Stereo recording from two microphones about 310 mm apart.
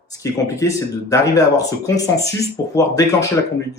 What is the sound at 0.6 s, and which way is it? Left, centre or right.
Speech, centre.